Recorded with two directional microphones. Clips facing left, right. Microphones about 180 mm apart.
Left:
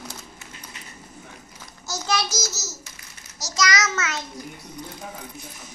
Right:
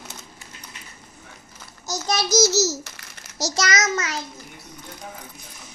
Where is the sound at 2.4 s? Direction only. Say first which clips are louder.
Right 15 dB; 85° right.